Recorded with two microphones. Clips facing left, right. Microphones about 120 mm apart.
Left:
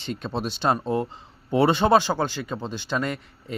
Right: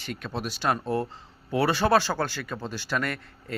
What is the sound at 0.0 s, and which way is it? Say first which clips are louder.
Speech: left 4 dB; 25° left (ahead or behind).